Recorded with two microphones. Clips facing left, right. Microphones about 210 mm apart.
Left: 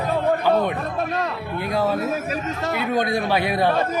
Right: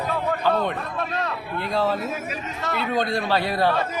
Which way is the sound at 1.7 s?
15° left (ahead or behind).